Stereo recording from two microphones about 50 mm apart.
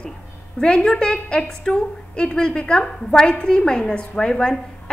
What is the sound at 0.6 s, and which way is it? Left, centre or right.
A woman's voice, centre.